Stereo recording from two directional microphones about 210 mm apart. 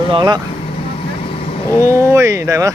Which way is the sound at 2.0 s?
15° right (ahead or behind).